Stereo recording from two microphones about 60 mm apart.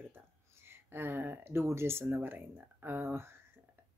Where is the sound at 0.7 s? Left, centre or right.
Right.